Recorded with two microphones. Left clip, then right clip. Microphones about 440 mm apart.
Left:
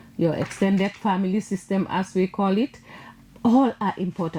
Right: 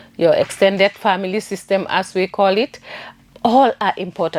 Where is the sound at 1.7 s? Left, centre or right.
Right.